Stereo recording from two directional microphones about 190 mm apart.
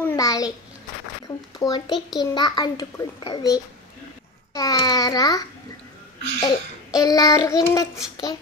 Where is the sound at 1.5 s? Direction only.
20° left (ahead or behind).